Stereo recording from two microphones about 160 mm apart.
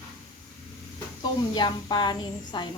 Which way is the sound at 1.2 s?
25° left (ahead or behind).